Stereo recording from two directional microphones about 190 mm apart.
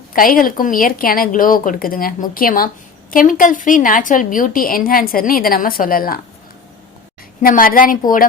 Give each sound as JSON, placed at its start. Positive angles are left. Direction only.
{"t": 0.1, "sound": "a woman's voice", "side_deg": 45}
{"t": 7.4, "sound": "speech", "side_deg": 50}